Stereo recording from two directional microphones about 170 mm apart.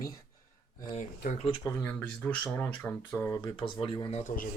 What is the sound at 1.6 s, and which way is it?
Speech, 15° left (ahead or behind).